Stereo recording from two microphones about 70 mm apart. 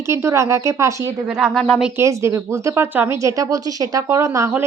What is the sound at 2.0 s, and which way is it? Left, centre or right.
Speech, right.